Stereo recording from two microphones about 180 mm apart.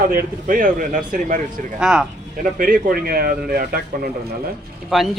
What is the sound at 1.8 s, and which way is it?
Speech, 5° right (ahead or behind).